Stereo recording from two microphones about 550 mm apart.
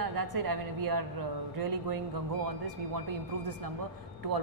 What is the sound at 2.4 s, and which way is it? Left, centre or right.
Speech, right.